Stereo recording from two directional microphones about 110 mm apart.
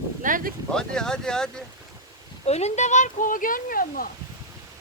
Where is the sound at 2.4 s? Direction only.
80° left.